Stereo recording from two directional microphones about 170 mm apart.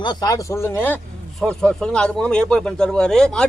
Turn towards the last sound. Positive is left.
turn(degrees=5)  # may be behind; listen again after turning